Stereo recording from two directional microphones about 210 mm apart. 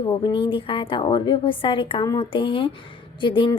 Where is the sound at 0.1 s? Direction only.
25° left (ahead or behind).